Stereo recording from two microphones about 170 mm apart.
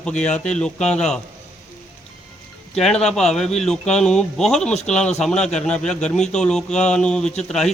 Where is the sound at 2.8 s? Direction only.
5° left (ahead or behind).